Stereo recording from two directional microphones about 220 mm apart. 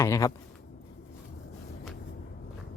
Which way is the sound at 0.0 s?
15° left (ahead or behind).